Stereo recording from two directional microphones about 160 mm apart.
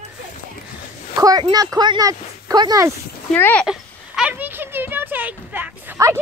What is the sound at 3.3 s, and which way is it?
Speech, 10° left (ahead or behind).